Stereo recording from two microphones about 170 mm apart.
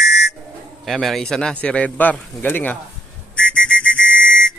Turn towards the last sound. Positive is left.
turn(degrees=5)  # may be behind; listen again after turning